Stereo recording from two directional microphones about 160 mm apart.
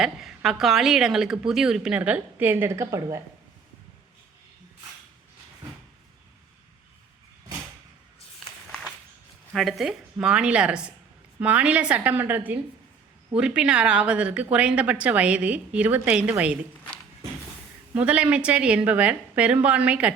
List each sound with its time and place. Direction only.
0.0 s a woman's voice: 5° right (ahead or behind); by 3.2 s 20° right (ahead or behind)
9.5 s a woman's voice: centre (ahead or behind)
17.9 s a woman's voice: 10° right (ahead or behind)